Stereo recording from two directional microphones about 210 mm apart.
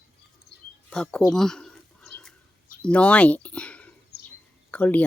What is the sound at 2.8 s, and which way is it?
Speech, 5° left (ahead or behind).